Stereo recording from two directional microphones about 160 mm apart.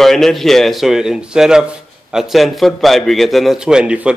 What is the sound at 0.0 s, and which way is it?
Speech, centre (ahead or behind).